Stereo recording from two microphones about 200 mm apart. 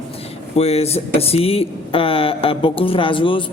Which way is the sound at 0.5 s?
30° left (ahead or behind).